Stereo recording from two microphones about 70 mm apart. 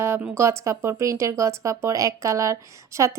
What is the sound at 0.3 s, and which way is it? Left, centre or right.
Speech, right.